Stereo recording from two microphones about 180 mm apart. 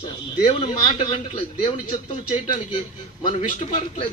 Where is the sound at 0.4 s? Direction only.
35° left (ahead or behind).